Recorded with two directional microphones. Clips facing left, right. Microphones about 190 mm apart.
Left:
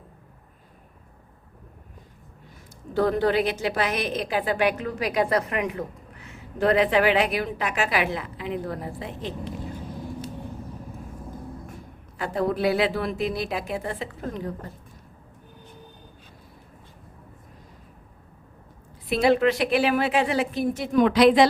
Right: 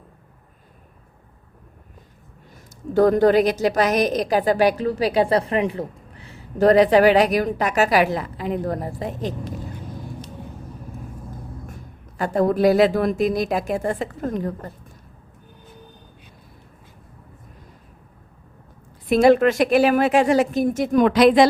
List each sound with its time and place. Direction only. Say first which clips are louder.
2.6 s a woman's voice: right 7 dB; 45° right (ahead or behind)
12.1 s a woman's voice: right 6 dB; 45° right (ahead or behind)
19.0 s a woman's voice: right 5 dB; 45° right (ahead or behind)